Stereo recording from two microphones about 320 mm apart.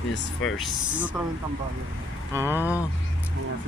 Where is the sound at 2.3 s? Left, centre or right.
Centre.